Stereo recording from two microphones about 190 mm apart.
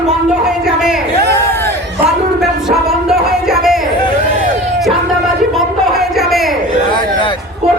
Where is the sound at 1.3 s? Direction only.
10° left (ahead or behind).